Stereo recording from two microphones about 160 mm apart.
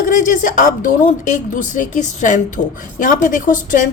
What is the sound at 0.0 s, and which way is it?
A woman's voice, 55° left (ahead or behind).